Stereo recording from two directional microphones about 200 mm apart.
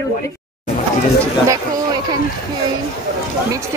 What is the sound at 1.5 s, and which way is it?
Speech, 15° right (ahead or behind).